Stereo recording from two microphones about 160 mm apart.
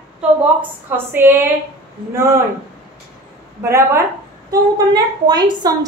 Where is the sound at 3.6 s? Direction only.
15° right (ahead or behind).